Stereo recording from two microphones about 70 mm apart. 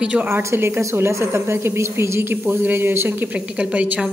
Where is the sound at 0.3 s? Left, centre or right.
Right.